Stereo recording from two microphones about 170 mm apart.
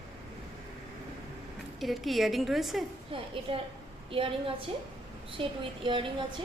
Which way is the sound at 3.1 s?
30° right (ahead or behind).